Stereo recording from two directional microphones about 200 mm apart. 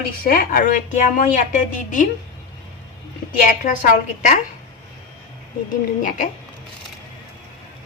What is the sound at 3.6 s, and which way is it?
Speech, 40° left (ahead or behind).